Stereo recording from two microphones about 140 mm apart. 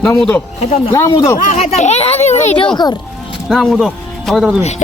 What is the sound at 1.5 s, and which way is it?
Speech, 55° left (ahead or behind).